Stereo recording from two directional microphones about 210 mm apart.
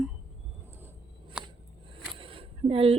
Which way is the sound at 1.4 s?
5° right (ahead or behind).